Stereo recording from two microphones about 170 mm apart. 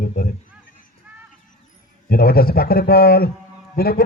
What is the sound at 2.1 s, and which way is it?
A man's voice, 65° left (ahead or behind).